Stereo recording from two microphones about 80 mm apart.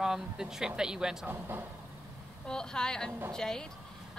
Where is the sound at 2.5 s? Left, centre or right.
Centre.